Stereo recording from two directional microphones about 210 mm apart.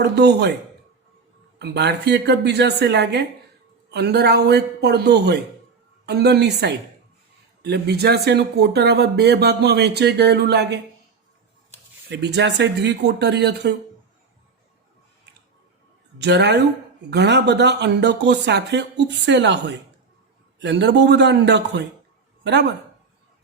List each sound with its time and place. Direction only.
0.0 s speech: 50° right (ahead or behind)
1.5 s speech: 55° right (ahead or behind)
12.0 s speech: 55° right (ahead or behind)
16.2 s speech: 55° right (ahead or behind)